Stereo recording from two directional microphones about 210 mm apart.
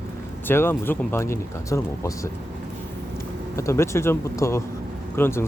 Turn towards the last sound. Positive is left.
turn(degrees=10)  # may be behind; listen again after turning